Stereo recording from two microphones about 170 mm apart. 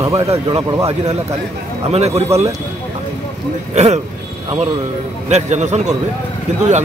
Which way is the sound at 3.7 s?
40° right (ahead or behind).